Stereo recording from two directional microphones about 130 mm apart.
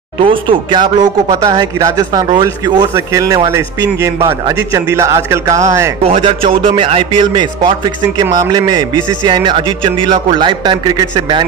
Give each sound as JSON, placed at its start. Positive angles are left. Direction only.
{"t": 0.2, "sound": "speech", "side_deg": -40}
{"t": 6.0, "sound": "a man's voice", "side_deg": -45}